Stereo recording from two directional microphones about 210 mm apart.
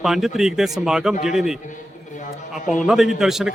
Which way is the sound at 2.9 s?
Centre (ahead or behind).